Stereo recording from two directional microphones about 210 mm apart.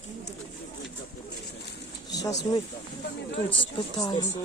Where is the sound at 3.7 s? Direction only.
20° left (ahead or behind).